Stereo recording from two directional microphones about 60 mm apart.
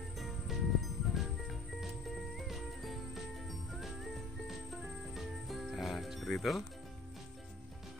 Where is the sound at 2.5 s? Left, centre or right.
Centre.